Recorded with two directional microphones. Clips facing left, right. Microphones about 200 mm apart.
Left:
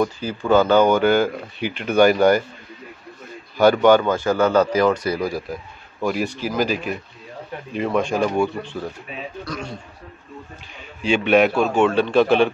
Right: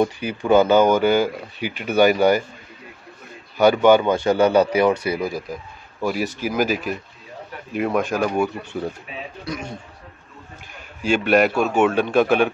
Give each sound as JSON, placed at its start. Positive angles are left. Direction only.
{"t": 0.0, "sound": "speech", "side_deg": -15}
{"t": 3.7, "sound": "a man's voice", "side_deg": -10}
{"t": 8.7, "sound": "speech", "side_deg": -20}
{"t": 11.1, "sound": "a man's voice", "side_deg": -5}